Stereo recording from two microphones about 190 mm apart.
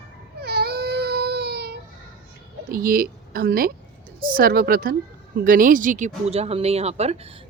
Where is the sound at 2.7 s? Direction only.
50° right (ahead or behind); by 7.3 s 35° right (ahead or behind).